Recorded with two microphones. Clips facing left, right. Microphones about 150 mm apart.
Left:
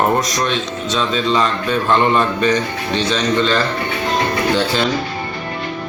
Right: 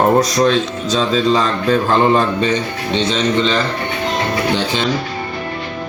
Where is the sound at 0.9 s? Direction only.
35° right (ahead or behind).